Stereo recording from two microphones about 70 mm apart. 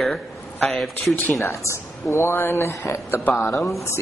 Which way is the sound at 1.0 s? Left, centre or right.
Left.